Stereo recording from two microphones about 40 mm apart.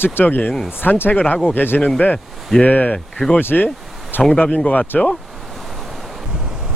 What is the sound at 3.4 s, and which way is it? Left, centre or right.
Speech, left.